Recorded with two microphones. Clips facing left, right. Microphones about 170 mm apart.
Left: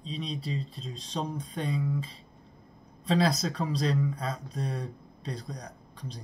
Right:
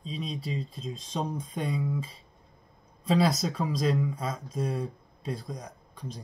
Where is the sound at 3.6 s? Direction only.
15° right (ahead or behind).